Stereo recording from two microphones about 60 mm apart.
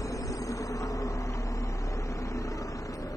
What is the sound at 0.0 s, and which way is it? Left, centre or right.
Vehicle, left.